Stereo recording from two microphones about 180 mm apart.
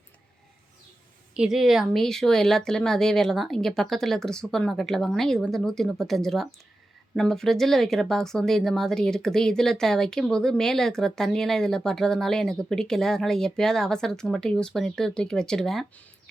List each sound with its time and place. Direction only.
1.4 s speech: centre (ahead or behind)